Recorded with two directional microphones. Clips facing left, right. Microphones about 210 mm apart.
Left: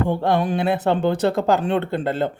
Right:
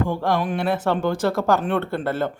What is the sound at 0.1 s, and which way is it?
Speech, 25° left (ahead or behind).